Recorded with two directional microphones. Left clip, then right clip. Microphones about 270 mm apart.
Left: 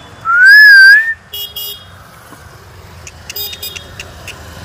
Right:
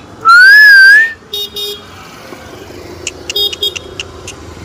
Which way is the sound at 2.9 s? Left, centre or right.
Right.